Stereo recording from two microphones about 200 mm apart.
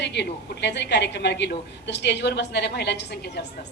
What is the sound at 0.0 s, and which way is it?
A woman's voice, 60° left (ahead or behind).